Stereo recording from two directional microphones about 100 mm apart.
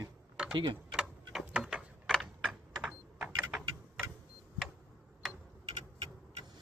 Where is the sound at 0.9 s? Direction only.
5° right (ahead or behind).